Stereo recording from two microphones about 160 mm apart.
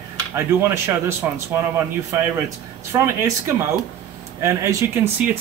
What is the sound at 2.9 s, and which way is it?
Speech, 15° right (ahead or behind).